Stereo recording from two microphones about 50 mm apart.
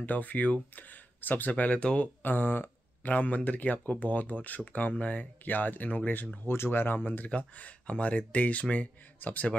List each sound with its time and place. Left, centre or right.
0.0 s speech: left
2.2 s speech: left
6.5 s speech: left
7.2 s speech: left